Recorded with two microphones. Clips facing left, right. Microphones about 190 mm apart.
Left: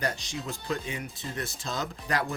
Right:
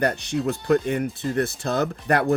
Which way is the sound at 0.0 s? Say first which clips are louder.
Right 10 dB; 60° right (ahead or behind).